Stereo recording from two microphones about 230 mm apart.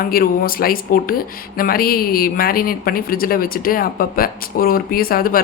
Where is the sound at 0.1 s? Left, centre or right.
Left.